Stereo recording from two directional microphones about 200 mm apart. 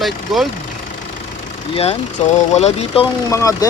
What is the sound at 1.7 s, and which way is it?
Speech, 30° left (ahead or behind).